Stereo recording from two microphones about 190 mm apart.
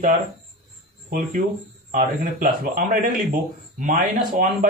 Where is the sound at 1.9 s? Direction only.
45° right (ahead or behind).